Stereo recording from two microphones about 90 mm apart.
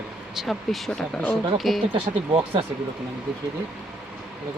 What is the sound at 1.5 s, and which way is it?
Speech, centre (ahead or behind).